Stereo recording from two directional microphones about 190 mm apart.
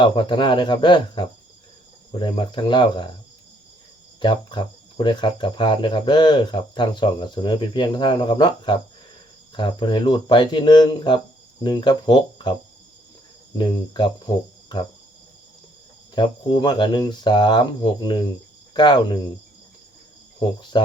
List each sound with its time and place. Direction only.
0.0 s speech: 25° left (ahead or behind)
4.2 s speech: 25° left (ahead or behind)
13.6 s speech: 25° left (ahead or behind)
16.1 s speech: 25° left (ahead or behind)
20.7 s speech: 25° left (ahead or behind)